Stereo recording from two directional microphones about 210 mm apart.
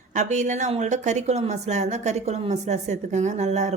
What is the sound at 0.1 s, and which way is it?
A woman's voice, 35° right (ahead or behind).